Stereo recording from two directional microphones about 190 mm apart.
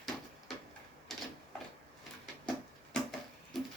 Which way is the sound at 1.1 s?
Centre (ahead or behind).